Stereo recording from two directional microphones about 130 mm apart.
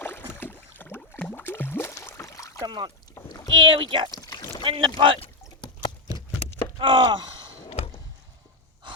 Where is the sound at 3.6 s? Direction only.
40° right (ahead or behind).